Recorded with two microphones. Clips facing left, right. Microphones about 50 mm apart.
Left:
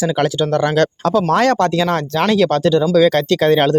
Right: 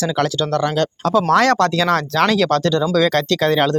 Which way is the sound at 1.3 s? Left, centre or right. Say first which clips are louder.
Right 1 dB; centre.